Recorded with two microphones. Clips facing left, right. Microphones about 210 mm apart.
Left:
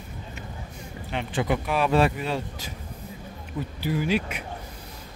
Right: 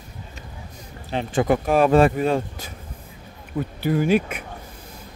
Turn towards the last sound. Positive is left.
turn(degrees=-50)  # may be behind; listen again after turning